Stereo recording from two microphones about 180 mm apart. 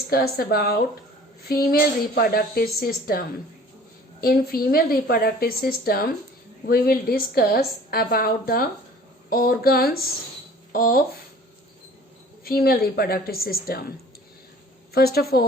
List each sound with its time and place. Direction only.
0.1 s a woman's voice: 55° left (ahead or behind)
12.5 s a woman's voice: 55° left (ahead or behind)
14.9 s a woman's voice: 60° left (ahead or behind)